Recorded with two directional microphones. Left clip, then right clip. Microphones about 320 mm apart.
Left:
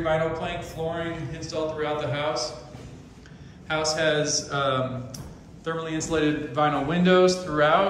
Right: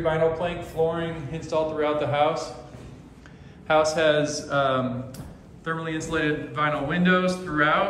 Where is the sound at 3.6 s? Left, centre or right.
Centre.